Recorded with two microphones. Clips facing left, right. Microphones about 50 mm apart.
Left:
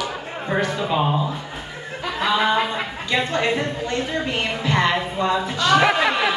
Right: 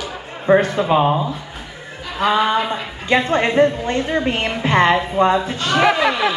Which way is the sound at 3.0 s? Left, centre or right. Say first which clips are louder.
Right 5 dB; right.